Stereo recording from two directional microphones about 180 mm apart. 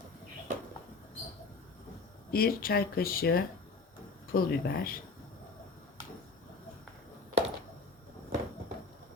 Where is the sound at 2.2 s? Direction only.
55° left (ahead or behind).